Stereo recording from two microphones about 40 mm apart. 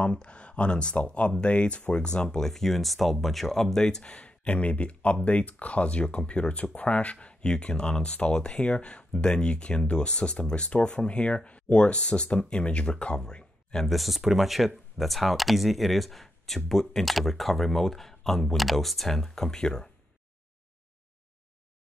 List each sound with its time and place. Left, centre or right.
0.0 s speech: left
13.8 s speech: centre